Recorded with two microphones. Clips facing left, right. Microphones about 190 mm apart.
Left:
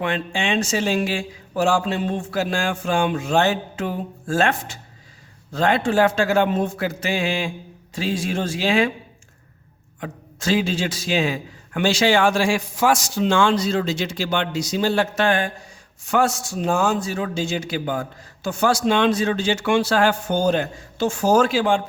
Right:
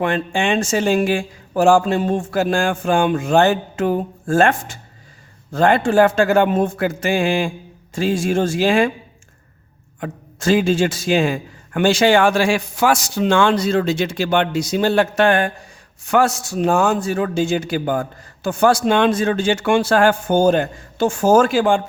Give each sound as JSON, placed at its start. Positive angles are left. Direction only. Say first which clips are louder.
{"t": 0.3, "sound": "a man's voice", "louder": "right 3 dB", "side_deg": -50}
{"t": 10.0, "sound": "a man's voice", "louder": "right 4 dB", "side_deg": -50}
{"t": 16.0, "sound": "a man's voice", "louder": "right 3 dB", "side_deg": -65}